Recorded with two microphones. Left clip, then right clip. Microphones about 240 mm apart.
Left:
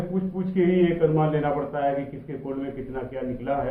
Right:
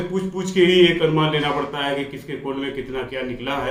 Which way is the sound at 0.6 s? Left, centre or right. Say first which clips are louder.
Right 6 dB; centre.